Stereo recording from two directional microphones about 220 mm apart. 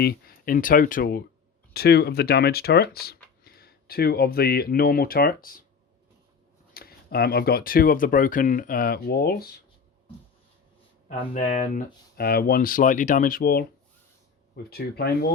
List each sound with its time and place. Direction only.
0.0 s speech: 45° left (ahead or behind)
6.7 s speech: 45° left (ahead or behind)
11.1 s speech: 35° left (ahead or behind)